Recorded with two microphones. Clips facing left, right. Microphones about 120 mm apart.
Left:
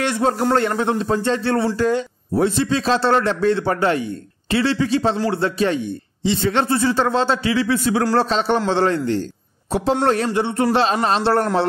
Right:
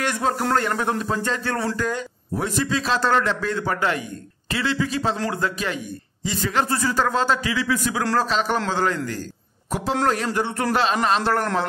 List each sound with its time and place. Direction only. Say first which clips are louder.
0.0 s a man's voice: left 4 dB; 30° left (ahead or behind)
10.3 s a man's voice: left 4 dB; 25° left (ahead or behind)